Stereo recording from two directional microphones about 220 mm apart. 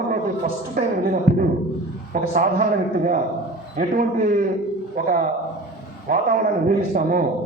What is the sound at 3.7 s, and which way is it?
A woman's voice, 40° right (ahead or behind).